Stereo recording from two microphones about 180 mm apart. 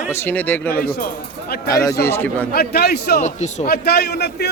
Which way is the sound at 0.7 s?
55° left (ahead or behind).